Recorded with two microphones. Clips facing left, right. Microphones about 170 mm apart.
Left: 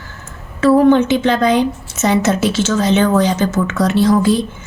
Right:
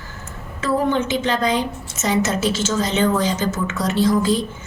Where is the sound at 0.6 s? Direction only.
65° left (ahead or behind).